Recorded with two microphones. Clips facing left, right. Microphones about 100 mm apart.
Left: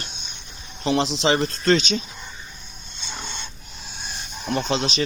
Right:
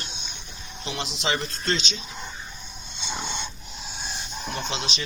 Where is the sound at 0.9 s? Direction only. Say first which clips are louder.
Left 8 dB; 35° left (ahead or behind).